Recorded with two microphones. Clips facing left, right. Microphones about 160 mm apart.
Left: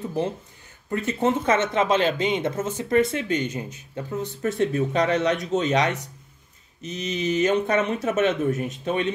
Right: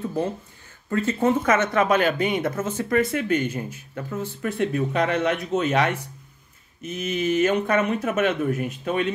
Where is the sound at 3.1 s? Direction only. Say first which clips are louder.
Right 2 dB; 50° right (ahead or behind).